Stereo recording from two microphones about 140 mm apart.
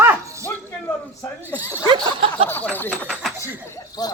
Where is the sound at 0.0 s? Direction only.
20° right (ahead or behind).